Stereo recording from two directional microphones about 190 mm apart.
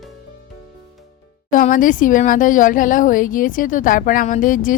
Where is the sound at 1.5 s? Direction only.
45° left (ahead or behind).